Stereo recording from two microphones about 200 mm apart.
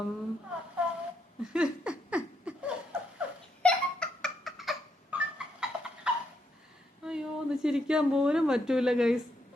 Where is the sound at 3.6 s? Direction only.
5° left (ahead or behind).